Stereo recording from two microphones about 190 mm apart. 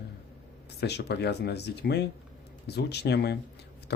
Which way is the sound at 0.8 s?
60° left (ahead or behind).